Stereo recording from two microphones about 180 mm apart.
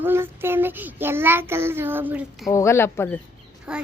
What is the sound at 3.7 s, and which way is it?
Speech, 5° right (ahead or behind).